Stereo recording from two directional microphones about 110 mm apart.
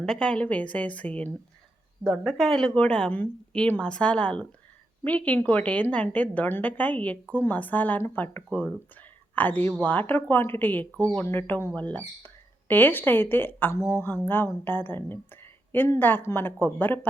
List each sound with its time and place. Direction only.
0.0 s a woman's voice: 5° left (ahead or behind)
2.0 s a woman's voice: centre (ahead or behind); by 17.1 s 20° left (ahead or behind)